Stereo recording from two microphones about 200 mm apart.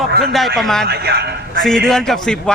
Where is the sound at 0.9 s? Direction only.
55° right (ahead or behind).